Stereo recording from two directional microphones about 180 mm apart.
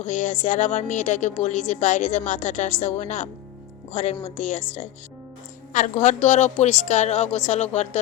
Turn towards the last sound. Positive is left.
turn(degrees=40)  # may be behind; listen again after turning